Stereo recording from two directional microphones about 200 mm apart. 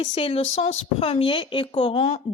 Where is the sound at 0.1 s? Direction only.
30° left (ahead or behind).